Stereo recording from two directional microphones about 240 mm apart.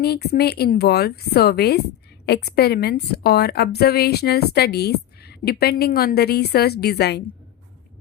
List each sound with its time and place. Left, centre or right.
0.0 s a woman's voice: left